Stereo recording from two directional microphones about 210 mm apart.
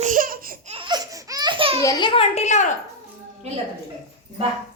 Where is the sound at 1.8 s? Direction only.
20° left (ahead or behind).